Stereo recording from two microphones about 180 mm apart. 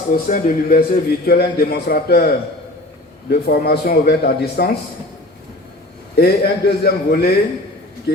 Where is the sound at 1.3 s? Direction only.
60° left (ahead or behind).